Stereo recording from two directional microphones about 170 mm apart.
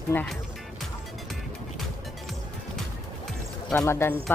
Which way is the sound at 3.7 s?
15° left (ahead or behind).